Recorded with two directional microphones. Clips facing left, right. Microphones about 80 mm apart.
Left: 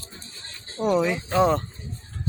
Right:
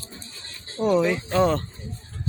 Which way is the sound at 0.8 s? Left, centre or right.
Centre.